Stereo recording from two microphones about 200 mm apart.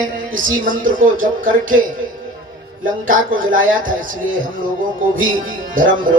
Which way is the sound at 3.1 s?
40° right (ahead or behind).